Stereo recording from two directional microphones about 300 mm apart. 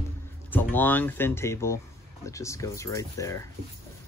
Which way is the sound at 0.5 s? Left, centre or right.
Centre.